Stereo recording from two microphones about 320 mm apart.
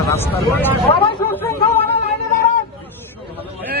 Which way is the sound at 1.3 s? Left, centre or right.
Centre.